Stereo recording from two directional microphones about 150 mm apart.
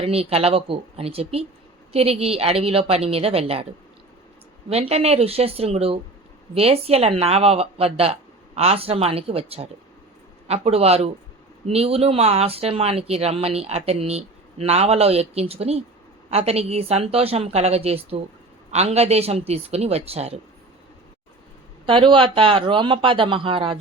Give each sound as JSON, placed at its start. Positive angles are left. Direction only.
{"t": 0.0, "sound": "speech", "side_deg": -40}
{"t": 4.7, "sound": "speech", "side_deg": -40}
{"t": 21.8, "sound": "speech", "side_deg": -35}